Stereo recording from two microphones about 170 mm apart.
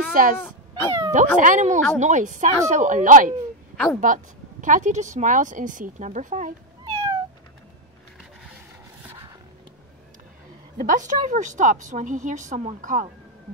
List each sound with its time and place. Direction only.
0.1 s speech: 55° right (ahead or behind)
0.4 s speech: 10° left (ahead or behind)
1.1 s speech: 50° right (ahead or behind)
3.7 s a woman's voice: 5° left (ahead or behind)
4.0 s speech: 50° right (ahead or behind)
6.8 s cat: 25° right (ahead or behind)
10.8 s speech: 50° right (ahead or behind)